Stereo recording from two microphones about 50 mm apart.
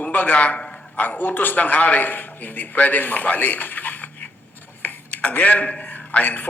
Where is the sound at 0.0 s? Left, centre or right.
Left.